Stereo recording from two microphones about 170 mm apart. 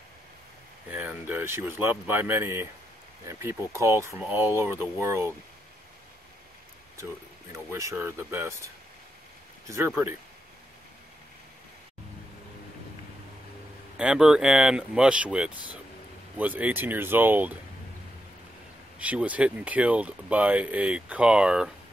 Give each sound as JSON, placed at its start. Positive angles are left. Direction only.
{"t": 0.8, "sound": "speech", "side_deg": -10}
{"t": 7.5, "sound": "speech", "side_deg": -15}
{"t": 9.7, "sound": "speech", "side_deg": -15}
{"t": 13.9, "sound": "speech", "side_deg": -5}
{"t": 18.9, "sound": "speech", "side_deg": -10}